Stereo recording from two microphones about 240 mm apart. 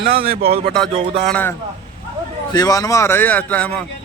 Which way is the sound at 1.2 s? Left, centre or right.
Centre.